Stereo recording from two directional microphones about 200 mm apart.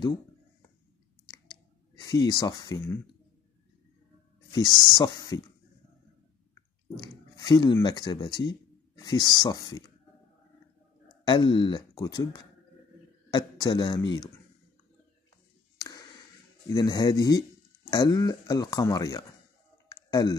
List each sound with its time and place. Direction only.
2.0 s speech: 20° left (ahead or behind)
4.5 s speech: 20° left (ahead or behind)
7.0 s speech: 20° left (ahead or behind)
11.2 s speech: 25° left (ahead or behind)
16.7 s speech: 20° left (ahead or behind)
19.9 s clicking: 20° left (ahead or behind)